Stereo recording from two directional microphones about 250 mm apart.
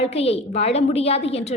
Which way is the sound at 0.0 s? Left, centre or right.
Left.